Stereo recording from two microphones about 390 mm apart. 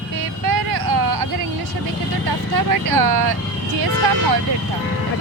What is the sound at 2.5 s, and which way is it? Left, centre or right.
Speech, right.